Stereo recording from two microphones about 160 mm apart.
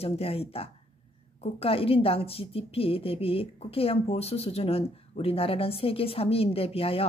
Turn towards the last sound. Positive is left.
turn(degrees=35)  # may be behind; listen again after turning